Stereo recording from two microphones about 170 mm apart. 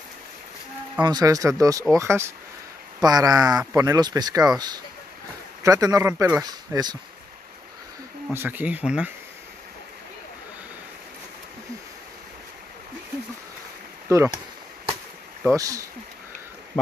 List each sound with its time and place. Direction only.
1.0 s speech: 20° right (ahead or behind)
8.3 s speech: 10° right (ahead or behind)
14.0 s speech: 15° right (ahead or behind)
15.5 s speech: 20° right (ahead or behind)